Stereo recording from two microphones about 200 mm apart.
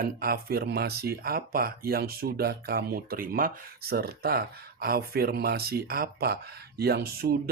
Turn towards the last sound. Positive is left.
turn(degrees=-50)  # may be behind; listen again after turning